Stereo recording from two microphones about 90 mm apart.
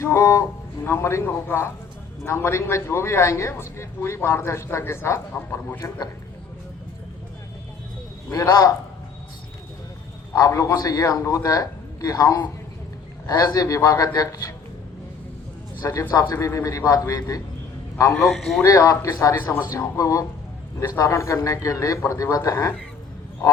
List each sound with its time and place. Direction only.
0.0 s a man's voice: 35° left (ahead or behind)
8.3 s speech: 40° left (ahead or behind)
10.3 s speech: 40° left (ahead or behind)
15.8 s a man's voice: 40° left (ahead or behind)
18.2 s a man's voice: centre (ahead or behind)
18.6 s speech: 35° left (ahead or behind)
20.7 s a man's voice: 25° left (ahead or behind)